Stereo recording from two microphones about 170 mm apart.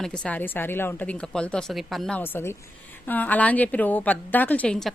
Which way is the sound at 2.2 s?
15° left (ahead or behind).